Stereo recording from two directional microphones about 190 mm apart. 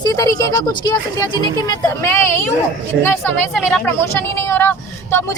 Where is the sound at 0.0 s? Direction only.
20° left (ahead or behind).